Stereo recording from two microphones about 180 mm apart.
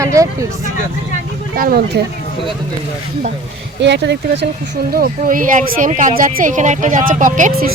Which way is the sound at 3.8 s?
75° right (ahead or behind).